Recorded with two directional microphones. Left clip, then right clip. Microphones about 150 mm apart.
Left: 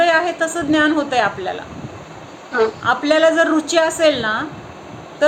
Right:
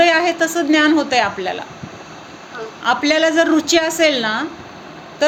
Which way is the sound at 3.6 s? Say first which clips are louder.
Even; 50° right (ahead or behind).